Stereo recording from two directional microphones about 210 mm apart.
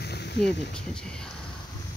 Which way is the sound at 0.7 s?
5° left (ahead or behind).